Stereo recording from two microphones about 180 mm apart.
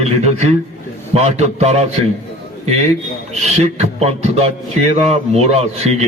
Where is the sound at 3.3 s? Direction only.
35° right (ahead or behind).